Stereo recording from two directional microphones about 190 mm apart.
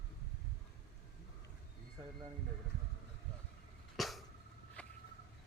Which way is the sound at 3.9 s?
Centre (ahead or behind).